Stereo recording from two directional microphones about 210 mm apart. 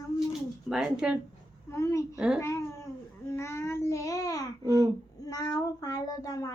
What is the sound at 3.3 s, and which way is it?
Child singing, 15° left (ahead or behind).